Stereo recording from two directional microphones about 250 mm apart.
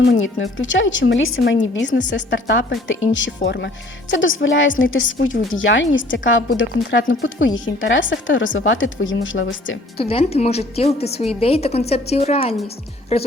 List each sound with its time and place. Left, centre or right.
0.0 s a woman's voice: left
10.0 s a woman's voice: left